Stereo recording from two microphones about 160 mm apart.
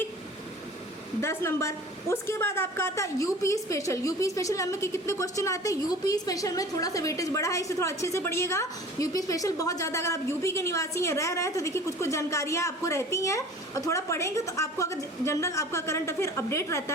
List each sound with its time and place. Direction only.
1.2 s a woman's voice: 15° left (ahead or behind)